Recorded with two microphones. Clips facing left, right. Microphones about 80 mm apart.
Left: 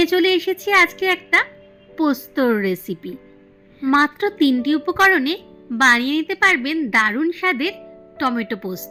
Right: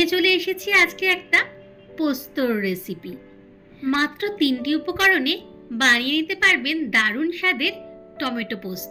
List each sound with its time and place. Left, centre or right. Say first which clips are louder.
0.0 s a woman's voice: left 4 dB; left
3.9 s a woman's voice: left 7 dB; left